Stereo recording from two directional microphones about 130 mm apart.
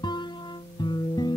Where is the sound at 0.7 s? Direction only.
35° left (ahead or behind).